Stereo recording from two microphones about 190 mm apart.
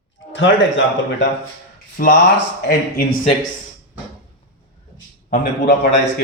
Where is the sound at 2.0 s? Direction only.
45° left (ahead or behind).